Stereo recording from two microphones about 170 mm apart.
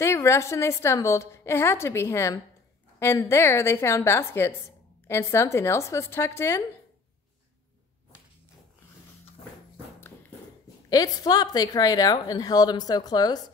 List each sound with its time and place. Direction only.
0.0 s a woman's voice: 15° left (ahead or behind)
10.9 s a woman's voice: 25° left (ahead or behind)